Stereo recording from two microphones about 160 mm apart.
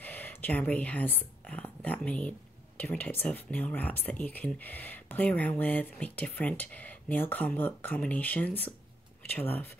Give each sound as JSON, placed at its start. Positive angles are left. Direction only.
{"t": 0.0, "sound": "speech", "side_deg": 10}